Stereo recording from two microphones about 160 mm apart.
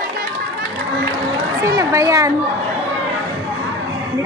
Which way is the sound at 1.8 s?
20° right (ahead or behind).